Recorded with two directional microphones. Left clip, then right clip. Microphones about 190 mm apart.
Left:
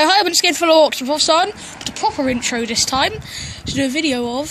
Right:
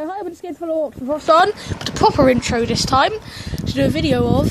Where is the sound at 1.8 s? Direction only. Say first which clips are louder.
Right 5 dB; 30° right (ahead or behind).